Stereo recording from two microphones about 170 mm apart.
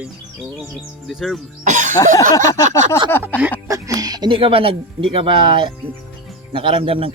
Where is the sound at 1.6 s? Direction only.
45° right (ahead or behind).